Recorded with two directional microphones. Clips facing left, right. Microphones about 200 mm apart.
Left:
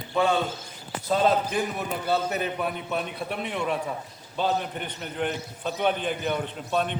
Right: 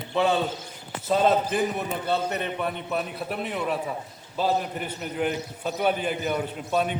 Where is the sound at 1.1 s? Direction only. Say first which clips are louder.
Right 1 dB; centre (ahead or behind).